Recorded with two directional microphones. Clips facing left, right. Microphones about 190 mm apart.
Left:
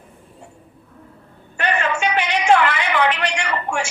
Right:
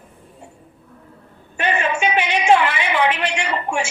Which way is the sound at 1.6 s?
20° right (ahead or behind).